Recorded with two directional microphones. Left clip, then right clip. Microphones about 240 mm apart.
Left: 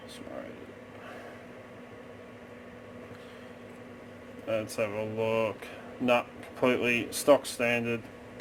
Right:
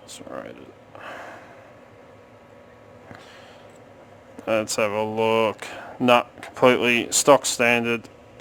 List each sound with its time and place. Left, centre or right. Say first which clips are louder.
4.4 s speech: right 9 dB; right